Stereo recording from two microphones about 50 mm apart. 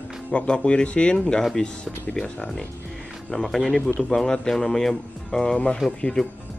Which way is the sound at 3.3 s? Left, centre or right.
Centre.